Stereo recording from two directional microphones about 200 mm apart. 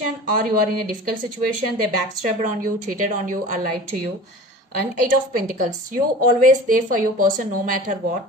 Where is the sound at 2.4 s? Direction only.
40° right (ahead or behind).